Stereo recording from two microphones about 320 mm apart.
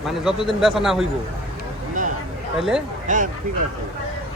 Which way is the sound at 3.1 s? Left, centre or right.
Right.